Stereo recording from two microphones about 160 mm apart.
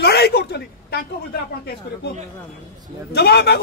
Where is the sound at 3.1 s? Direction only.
90° left.